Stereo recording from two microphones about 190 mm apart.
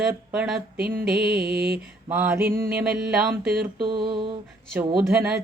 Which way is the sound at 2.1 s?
10° right (ahead or behind).